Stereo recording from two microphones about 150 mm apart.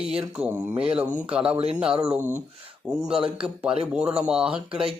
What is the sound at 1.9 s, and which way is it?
Speech, 40° right (ahead or behind).